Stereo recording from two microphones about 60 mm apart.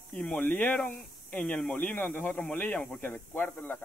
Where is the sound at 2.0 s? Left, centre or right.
Left.